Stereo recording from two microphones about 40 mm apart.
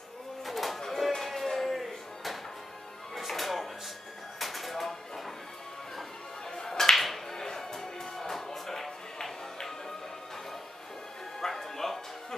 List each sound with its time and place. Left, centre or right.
0.5 s music: centre
1.1 s a sound: centre
3.2 s music: centre
4.4 s a sound: centre
6.5 s finger snapping: centre
7.3 s music: centre
11.4 s music: centre